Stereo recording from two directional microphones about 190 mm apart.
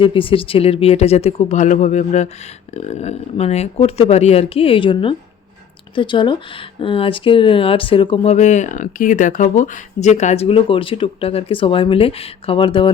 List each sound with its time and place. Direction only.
0.0 s speech: 25° left (ahead or behind)